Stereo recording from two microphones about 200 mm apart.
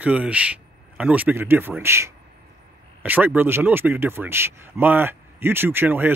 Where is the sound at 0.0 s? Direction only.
5° right (ahead or behind).